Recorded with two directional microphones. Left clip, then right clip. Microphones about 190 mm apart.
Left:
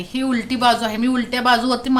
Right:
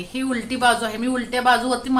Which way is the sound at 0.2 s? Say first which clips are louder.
Left 2 dB; 45° left (ahead or behind).